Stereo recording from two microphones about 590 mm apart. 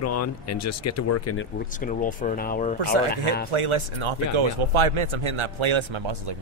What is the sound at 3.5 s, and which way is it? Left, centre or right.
Speech, right.